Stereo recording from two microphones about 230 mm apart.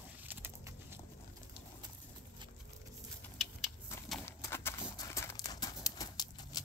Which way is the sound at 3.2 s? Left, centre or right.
Centre.